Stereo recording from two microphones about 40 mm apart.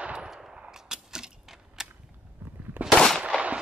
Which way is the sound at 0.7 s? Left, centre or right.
Centre.